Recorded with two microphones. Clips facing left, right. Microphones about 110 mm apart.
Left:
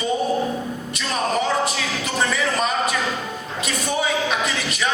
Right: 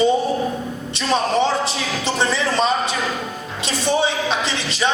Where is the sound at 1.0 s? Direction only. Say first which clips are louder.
Right 5 dB; 30° right (ahead or behind).